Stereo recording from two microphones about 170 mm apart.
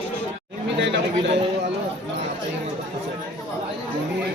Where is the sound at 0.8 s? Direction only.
90° right.